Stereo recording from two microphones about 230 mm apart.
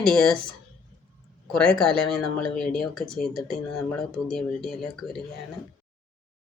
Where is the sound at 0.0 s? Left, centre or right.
Centre.